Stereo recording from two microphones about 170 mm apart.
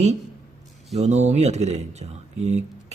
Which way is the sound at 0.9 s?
40° right (ahead or behind).